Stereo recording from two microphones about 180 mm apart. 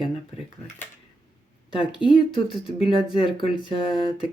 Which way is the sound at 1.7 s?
25° left (ahead or behind).